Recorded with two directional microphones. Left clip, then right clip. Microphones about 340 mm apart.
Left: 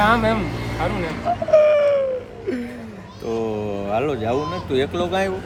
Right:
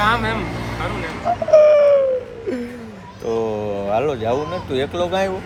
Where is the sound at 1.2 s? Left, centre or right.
Centre.